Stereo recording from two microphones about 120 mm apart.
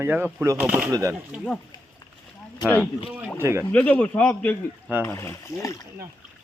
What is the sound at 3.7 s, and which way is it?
A man's voice, 10° left (ahead or behind).